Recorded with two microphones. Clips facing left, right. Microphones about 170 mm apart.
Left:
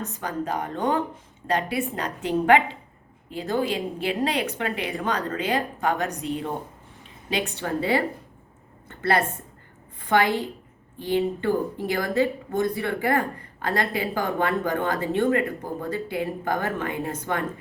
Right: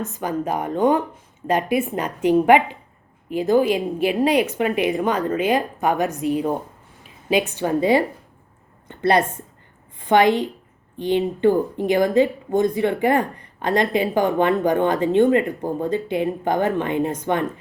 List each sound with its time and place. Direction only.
0.2 s a woman's voice: 15° right (ahead or behind)
7.6 s a woman's voice: 15° right (ahead or behind)